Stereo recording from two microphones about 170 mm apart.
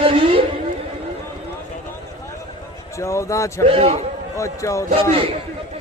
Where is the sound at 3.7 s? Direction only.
35° right (ahead or behind).